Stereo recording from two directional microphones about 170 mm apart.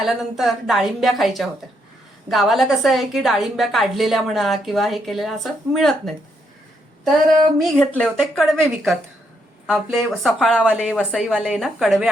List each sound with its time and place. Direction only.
0.0 s a woman's voice: centre (ahead or behind)
7.6 s a woman's voice: 5° left (ahead or behind)